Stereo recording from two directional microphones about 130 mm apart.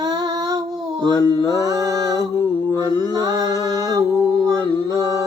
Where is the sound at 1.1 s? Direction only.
25° left (ahead or behind).